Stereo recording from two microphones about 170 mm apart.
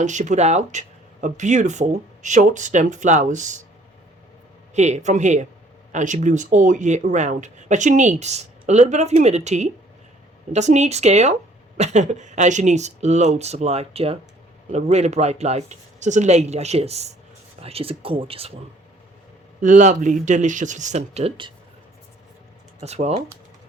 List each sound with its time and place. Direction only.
0.0 s speech: 45° right (ahead or behind)
4.7 s speech: 40° right (ahead or behind)
19.6 s speech: 45° right (ahead or behind)
22.8 s speech: 40° right (ahead or behind)